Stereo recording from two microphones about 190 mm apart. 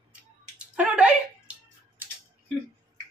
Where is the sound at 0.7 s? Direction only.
5° right (ahead or behind).